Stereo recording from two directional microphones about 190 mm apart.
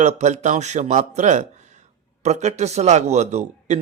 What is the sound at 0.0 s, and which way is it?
A man's voice, 35° right (ahead or behind).